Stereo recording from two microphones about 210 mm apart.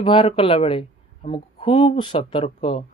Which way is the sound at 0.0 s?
25° left (ahead or behind).